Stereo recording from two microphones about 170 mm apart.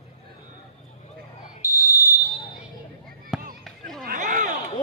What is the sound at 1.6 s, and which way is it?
Fire alarm, 15° right (ahead or behind).